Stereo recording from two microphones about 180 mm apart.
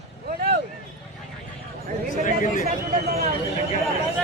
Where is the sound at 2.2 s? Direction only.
45° left (ahead or behind).